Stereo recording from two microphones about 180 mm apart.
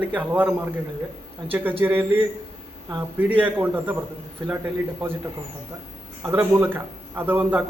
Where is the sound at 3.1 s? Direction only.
10° right (ahead or behind).